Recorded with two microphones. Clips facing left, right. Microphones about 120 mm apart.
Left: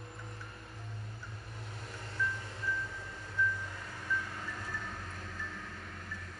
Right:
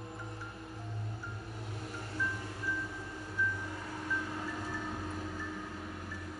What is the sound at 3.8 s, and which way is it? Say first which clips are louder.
Vehicle: right 1 dB; 15° right (ahead or behind).